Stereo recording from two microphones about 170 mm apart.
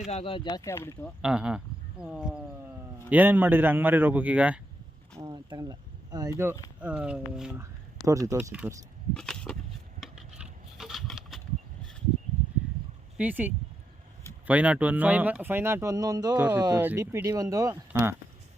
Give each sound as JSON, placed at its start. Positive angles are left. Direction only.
{"t": 0.1, "sound": "speech", "side_deg": 35}
{"t": 1.2, "sound": "speech", "side_deg": -5}
{"t": 5.1, "sound": "speech", "side_deg": -20}
{"t": 7.6, "sound": "speech", "side_deg": -20}
{"t": 9.1, "sound": "a sound", "side_deg": 5}
{"t": 13.1, "sound": "speech", "side_deg": -10}